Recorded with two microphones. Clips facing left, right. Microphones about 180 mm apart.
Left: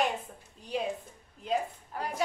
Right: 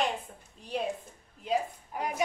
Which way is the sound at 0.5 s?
Centre (ahead or behind).